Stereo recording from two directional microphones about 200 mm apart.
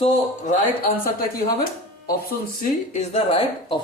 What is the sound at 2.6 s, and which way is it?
Speech, 35° left (ahead or behind).